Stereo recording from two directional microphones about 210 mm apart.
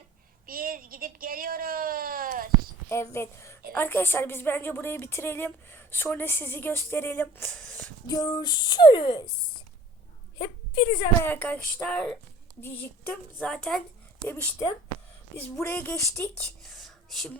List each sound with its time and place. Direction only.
0.4 s a sound: 45° right (ahead or behind)
2.9 s a woman's voice: 10° left (ahead or behind)
8.0 s speech: 15° left (ahead or behind)
10.3 s a woman's voice: 20° left (ahead or behind)
11.2 s a woman's voice: 10° left (ahead or behind)
16.6 s whispering: centre (ahead or behind)